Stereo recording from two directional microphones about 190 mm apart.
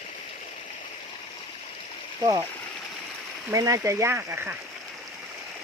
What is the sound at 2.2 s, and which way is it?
Speech, 15° right (ahead or behind).